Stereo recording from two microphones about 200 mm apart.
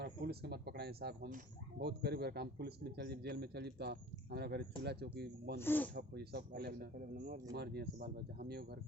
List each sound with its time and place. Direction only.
0.0 s a man's voice: 55° right (ahead or behind)
5.5 s speech: 10° left (ahead or behind)
5.9 s speech: 55° right (ahead or behind)